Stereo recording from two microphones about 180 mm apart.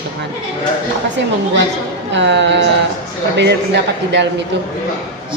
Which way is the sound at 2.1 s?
85° right.